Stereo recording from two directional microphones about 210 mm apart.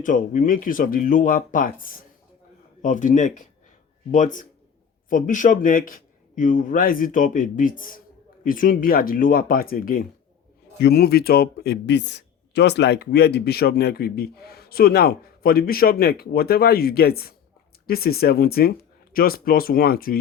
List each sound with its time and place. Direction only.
0.0 s a man's voice: 40° left (ahead or behind)